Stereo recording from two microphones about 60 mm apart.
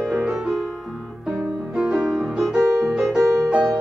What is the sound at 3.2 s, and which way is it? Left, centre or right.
Music, right.